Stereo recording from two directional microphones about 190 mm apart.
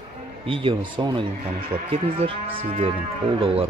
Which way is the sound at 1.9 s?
30° right (ahead or behind).